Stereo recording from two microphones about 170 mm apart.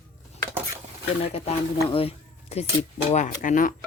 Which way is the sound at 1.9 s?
35° left (ahead or behind).